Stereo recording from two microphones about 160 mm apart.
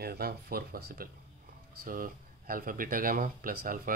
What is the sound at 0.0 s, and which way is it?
Speech, 75° right (ahead or behind).